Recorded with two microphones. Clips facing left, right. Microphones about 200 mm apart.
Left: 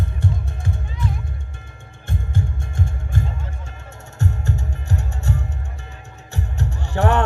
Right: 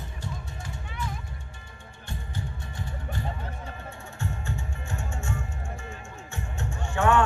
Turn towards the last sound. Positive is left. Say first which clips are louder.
# left 3 dB
turn(degrees=40)  # may be behind; listen again after turning